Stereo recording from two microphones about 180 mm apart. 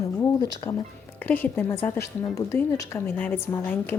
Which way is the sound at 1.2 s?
10° left (ahead or behind).